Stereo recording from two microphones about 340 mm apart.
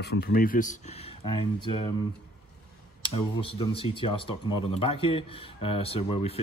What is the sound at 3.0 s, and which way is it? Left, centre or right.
Speech, centre.